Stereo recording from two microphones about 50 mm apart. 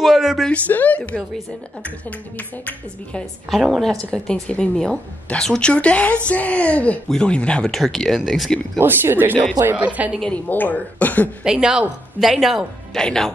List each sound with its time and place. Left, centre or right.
0.0 s speech: centre
0.5 s a woman's voice: left
3.4 s speech: centre
4.1 s a woman's voice: centre
7.1 s a woman's voice: centre
7.6 s speech: centre
8.7 s speech: right
9.8 s a woman's voice: right
10.5 s speech: left
11.4 s a man's voice: centre
12.2 s speech: centre
12.9 s speech: centre